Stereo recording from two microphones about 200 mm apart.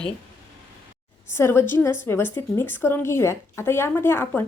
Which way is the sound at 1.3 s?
10° left (ahead or behind).